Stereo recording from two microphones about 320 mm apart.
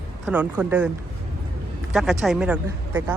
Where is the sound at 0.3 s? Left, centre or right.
Centre.